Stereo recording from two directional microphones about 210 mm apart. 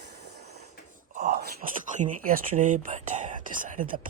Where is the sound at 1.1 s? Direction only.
40° right (ahead or behind).